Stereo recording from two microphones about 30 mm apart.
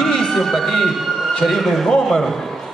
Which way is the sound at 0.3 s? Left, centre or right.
Centre.